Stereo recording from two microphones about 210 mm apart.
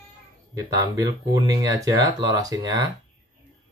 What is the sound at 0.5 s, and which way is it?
Speech, 15° right (ahead or behind).